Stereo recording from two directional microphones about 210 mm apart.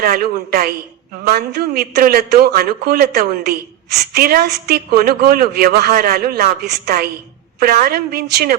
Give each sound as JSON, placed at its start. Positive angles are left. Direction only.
{"t": 0.0, "sound": "a man's voice", "side_deg": -45}